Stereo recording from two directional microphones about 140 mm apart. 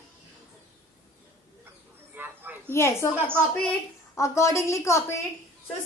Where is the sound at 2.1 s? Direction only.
15° right (ahead or behind).